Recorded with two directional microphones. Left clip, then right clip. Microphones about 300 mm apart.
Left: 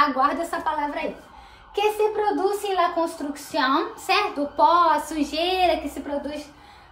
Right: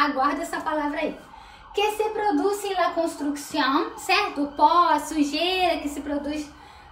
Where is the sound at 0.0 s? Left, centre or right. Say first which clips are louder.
Left 2 dB; centre.